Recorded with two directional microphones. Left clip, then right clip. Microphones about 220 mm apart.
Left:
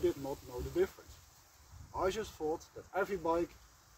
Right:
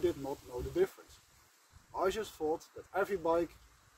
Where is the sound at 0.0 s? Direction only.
20° right (ahead or behind).